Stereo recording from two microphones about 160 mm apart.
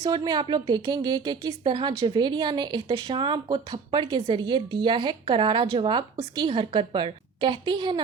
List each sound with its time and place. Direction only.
0.0 s a woman's voice: 30° right (ahead or behind)